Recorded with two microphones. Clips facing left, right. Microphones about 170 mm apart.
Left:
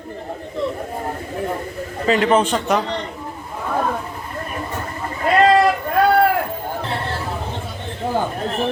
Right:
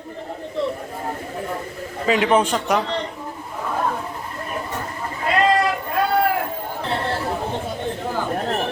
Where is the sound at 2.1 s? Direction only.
5° right (ahead or behind).